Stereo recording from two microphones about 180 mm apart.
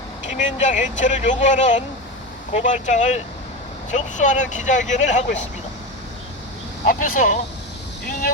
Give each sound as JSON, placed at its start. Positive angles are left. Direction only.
{"t": 0.3, "sound": "speech", "side_deg": 45}
{"t": 6.8, "sound": "speech", "side_deg": 45}